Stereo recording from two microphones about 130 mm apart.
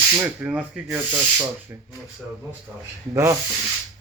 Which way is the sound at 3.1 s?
25° right (ahead or behind).